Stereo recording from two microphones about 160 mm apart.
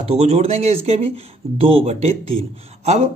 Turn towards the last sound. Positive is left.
turn(degrees=-45)  # may be behind; listen again after turning